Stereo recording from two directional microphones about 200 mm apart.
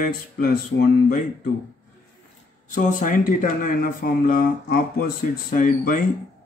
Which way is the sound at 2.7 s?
40° left (ahead or behind).